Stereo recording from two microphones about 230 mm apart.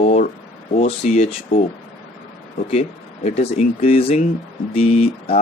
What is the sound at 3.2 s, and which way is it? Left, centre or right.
Speech, left.